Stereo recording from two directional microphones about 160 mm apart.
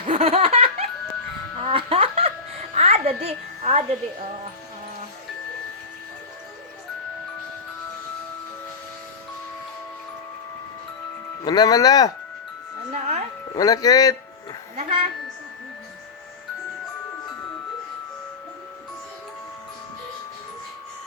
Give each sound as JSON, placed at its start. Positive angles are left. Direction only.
{"t": 0.1, "sound": "laughter", "side_deg": -40}
{"t": 1.6, "sound": "music", "side_deg": -35}
{"t": 11.4, "sound": "speech", "side_deg": 25}
{"t": 12.9, "sound": "music", "side_deg": -40}
{"t": 13.5, "sound": "speech", "side_deg": 20}
{"t": 14.8, "sound": "a woman's voice", "side_deg": -35}